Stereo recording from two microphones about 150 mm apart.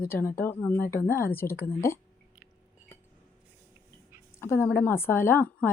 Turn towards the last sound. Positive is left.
turn(degrees=15)  # may be behind; listen again after turning